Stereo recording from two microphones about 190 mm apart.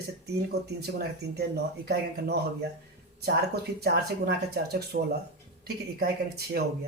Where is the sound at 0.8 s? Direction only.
55° right (ahead or behind).